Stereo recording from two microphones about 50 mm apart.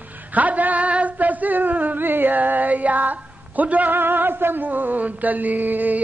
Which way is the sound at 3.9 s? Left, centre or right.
Right.